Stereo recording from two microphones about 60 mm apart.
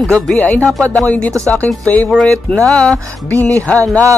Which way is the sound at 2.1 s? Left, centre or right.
Right.